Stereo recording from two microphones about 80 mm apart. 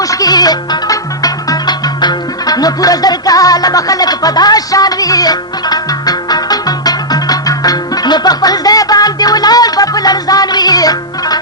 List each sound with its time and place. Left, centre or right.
0.0 s music: left